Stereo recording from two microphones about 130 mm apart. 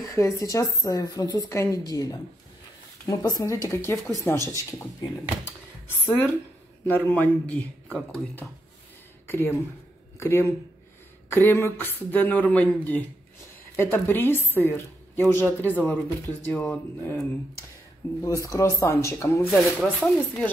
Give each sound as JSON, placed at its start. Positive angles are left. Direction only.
{"t": 0.0, "sound": "a woman's voice", "side_deg": 25}
{"t": 5.4, "sound": "a sound", "side_deg": 15}
{"t": 6.9, "sound": "a woman's voice", "side_deg": 10}
{"t": 18.2, "sound": "a woman's voice", "side_deg": 25}
{"t": 19.5, "sound": "speech", "side_deg": 5}